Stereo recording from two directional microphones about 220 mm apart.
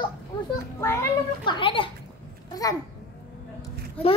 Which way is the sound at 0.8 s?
10° left (ahead or behind).